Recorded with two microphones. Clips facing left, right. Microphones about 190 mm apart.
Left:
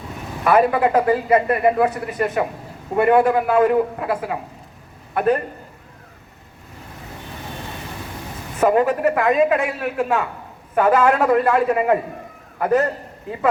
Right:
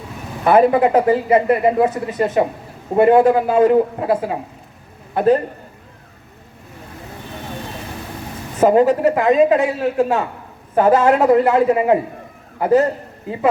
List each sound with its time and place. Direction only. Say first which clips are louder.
0.4 s speech: right 3 dB; 25° right (ahead or behind)
8.6 s a man's voice: right 4 dB; 25° right (ahead or behind)